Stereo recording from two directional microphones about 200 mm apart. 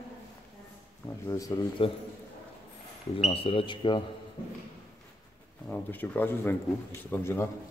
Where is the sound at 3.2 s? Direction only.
30° left (ahead or behind).